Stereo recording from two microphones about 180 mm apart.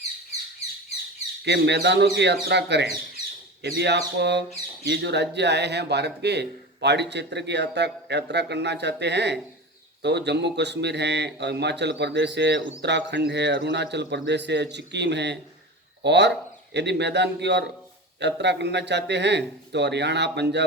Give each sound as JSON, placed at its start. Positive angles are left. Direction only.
{"t": 1.5, "sound": "speech", "side_deg": -70}